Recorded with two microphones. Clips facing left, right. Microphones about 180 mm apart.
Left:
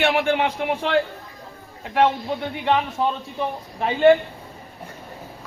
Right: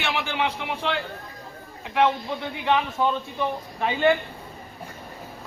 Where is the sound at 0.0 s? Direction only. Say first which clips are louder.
Left 7 dB; 55° left (ahead or behind).